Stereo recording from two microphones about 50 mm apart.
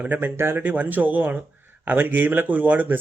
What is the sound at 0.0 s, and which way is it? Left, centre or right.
Speech, right.